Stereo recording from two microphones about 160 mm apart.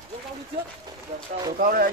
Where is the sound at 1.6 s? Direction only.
65° right (ahead or behind).